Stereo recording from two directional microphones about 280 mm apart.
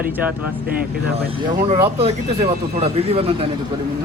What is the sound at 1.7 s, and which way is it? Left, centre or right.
Speech, right.